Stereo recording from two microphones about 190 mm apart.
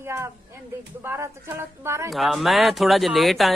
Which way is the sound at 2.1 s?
Centre (ahead or behind).